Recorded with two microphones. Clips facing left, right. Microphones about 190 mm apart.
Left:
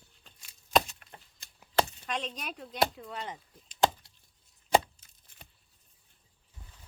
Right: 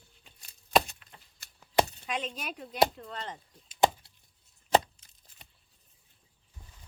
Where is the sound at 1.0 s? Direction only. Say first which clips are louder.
Left 4 dB; 55° left (ahead or behind).